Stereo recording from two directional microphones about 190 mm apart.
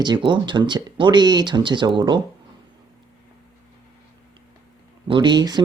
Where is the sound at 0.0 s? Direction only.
25° right (ahead or behind).